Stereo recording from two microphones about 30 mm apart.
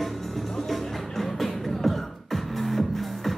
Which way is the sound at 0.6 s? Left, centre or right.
Centre.